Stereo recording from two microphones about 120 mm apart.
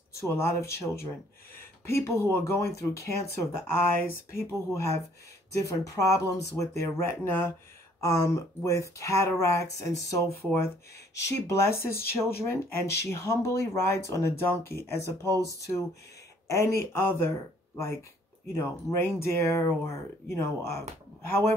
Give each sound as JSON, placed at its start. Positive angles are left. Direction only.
{"t": 0.3, "sound": "speech", "side_deg": 20}
{"t": 1.6, "sound": "a sound", "side_deg": 20}
{"t": 2.3, "sound": "speech", "side_deg": 20}
{"t": 15.0, "sound": "speech", "side_deg": -30}
{"t": 15.4, "sound": "speech", "side_deg": 25}
{"t": 18.5, "sound": "speech", "side_deg": 25}